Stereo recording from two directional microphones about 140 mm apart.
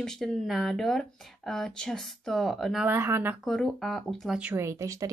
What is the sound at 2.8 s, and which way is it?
Speech, 15° right (ahead or behind).